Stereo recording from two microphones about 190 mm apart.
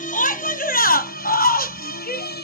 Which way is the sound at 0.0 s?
45° left (ahead or behind).